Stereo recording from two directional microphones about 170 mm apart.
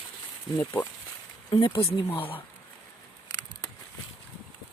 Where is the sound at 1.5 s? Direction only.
30° left (ahead or behind).